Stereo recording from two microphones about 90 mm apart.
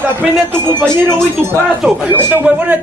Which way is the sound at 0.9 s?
25° right (ahead or behind).